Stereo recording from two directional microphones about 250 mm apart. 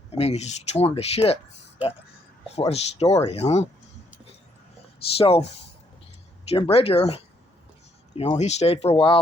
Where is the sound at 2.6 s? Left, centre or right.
Left.